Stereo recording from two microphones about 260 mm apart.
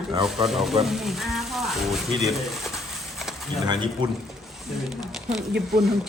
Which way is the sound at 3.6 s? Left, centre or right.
Centre.